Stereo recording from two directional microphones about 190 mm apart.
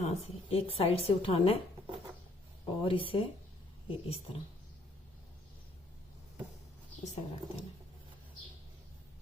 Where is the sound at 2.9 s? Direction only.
30° left (ahead or behind).